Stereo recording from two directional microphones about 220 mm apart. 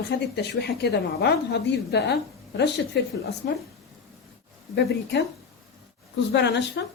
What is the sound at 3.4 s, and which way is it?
Speech, 45° left (ahead or behind).